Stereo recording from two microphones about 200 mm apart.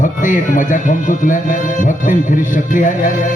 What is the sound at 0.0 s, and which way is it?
Speech, 40° left (ahead or behind).